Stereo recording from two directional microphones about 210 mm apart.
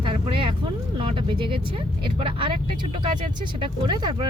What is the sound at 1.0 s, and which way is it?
Speech, 25° right (ahead or behind).